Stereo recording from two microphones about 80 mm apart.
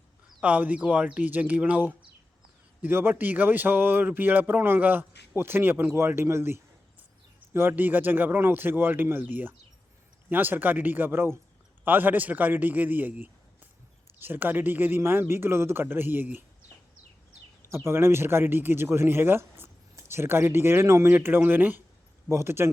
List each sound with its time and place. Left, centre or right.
0.4 s speech: centre
17.7 s speech: right